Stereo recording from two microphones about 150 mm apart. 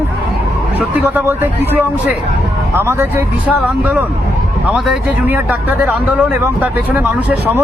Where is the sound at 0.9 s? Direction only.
15° right (ahead or behind).